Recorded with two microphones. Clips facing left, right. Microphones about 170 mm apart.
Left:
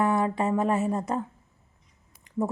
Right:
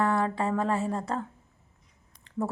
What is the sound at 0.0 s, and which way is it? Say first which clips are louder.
Speech: left 2 dB; 20° left (ahead or behind).